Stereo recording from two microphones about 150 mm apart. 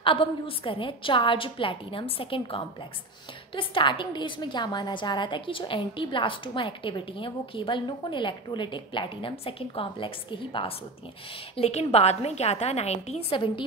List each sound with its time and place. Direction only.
0.0 s a woman's voice: 35° left (ahead or behind)